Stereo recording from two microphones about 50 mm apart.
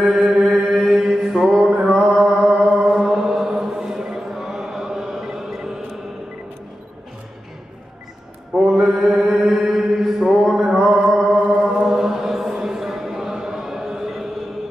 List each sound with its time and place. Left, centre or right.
0.4 s mantra: right
0.7 s mantra: centre
2.7 s chant: centre
8.7 s mantra: centre
9.2 s mantra: centre
9.7 s mantra: centre
11.2 s chant: right
11.6 s chant: centre